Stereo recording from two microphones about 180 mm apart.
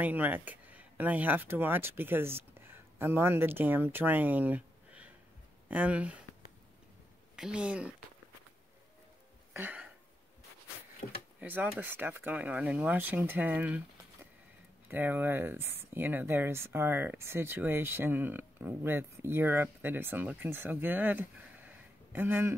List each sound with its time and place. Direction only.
0.0 s speech: 10° right (ahead or behind)
7.3 s speech: 5° right (ahead or behind)
9.5 s a sound: 10° right (ahead or behind)
11.0 s speech: 55° left (ahead or behind)
11.3 s speech: 10° right (ahead or behind)
14.9 s speech: 10° right (ahead or behind)